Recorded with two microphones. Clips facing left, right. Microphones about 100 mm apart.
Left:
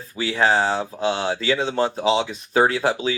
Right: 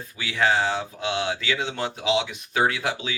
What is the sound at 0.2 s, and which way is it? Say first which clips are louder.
Speech: left 3 dB; 35° left (ahead or behind).